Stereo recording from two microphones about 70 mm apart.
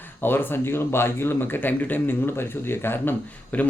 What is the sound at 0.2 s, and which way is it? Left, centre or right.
Speech, left.